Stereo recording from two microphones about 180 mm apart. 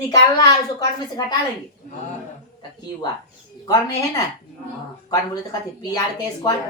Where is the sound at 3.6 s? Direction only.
20° left (ahead or behind).